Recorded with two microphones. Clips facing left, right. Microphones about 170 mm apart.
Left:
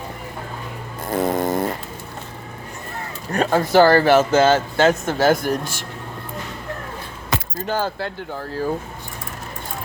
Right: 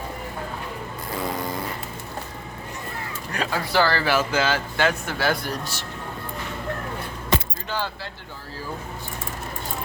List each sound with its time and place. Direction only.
1.1 s a sound: 45° left (ahead or behind)
3.3 s speech: 45° left (ahead or behind)
7.7 s speech: 45° left (ahead or behind)